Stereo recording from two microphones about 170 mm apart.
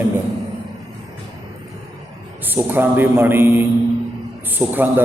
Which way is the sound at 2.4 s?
10° right (ahead or behind).